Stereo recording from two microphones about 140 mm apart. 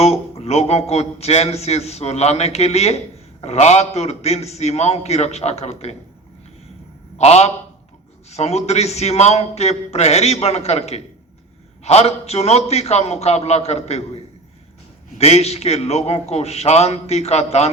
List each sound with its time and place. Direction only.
0.0 s a man's voice: 50° left (ahead or behind)
7.2 s a man's voice: 50° left (ahead or behind)
15.1 s a man's voice: 50° left (ahead or behind)